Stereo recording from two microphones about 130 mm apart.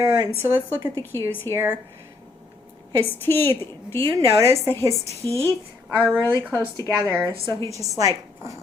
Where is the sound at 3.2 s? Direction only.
20° left (ahead or behind).